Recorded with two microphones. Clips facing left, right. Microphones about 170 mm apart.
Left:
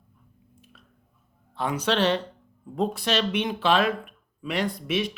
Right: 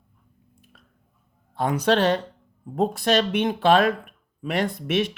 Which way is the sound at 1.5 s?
45° right (ahead or behind).